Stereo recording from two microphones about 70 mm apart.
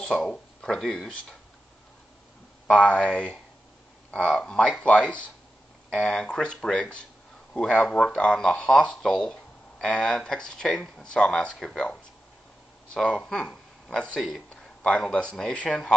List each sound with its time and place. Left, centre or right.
0.0 s speech: centre
2.7 s speech: centre